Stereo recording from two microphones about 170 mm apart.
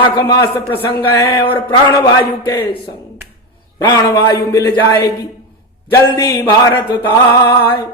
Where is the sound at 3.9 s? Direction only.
20° left (ahead or behind).